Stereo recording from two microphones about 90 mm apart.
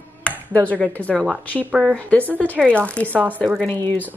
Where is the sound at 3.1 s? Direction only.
20° right (ahead or behind).